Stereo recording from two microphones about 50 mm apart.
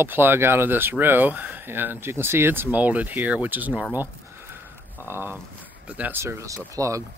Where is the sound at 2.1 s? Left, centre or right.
Right.